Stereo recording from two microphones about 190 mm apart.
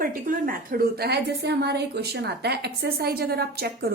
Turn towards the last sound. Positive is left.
turn(degrees=-55)  # may be behind; listen again after turning